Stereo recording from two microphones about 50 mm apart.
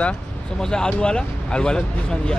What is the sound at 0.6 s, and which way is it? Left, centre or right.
Speech, centre.